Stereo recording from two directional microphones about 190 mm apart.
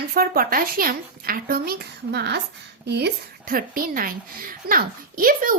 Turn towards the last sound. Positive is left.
turn(degrees=-45)  # may be behind; listen again after turning